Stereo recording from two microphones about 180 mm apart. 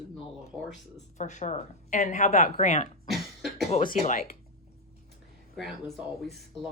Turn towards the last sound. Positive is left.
turn(degrees=0)  # may be behind; listen again after turning